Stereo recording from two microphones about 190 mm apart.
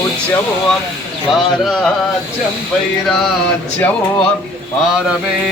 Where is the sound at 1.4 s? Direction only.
Centre (ahead or behind).